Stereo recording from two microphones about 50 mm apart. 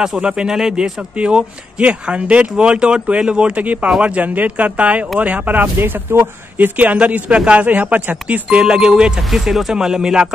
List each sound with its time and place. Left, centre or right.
0.0 s speech: centre; by 5.7 s right
5.8 s speech: right
6.8 s speech: right; by 10.2 s centre